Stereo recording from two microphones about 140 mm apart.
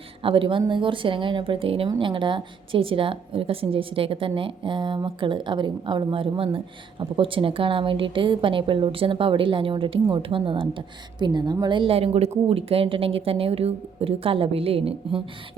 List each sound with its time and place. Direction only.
0.2 s a woman's voice: 40° right (ahead or behind)